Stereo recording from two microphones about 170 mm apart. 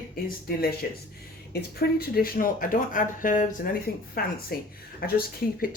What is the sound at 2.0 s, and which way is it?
Speech, 60° left (ahead or behind).